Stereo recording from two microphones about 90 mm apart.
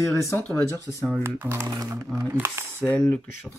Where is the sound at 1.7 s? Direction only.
40° right (ahead or behind).